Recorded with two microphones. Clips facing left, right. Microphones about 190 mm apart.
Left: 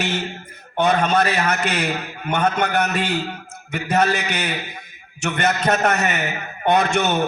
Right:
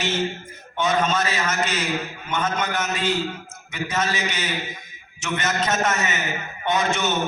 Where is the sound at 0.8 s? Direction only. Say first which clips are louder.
Left 4 dB; 60° left (ahead or behind).